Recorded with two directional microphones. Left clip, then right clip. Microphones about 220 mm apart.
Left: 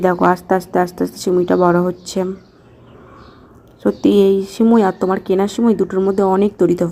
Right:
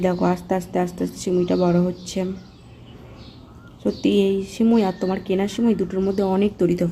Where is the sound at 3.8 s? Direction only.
20° left (ahead or behind).